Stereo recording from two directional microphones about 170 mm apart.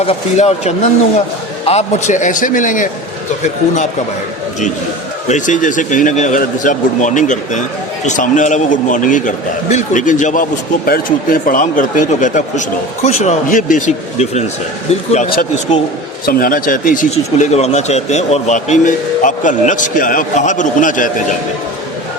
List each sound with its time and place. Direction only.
0.0 s speech: 40° left (ahead or behind)
5.3 s speech: 50° left (ahead or behind)
10.8 s speech: 60° left (ahead or behind)
16.2 s speech: 60° left (ahead or behind)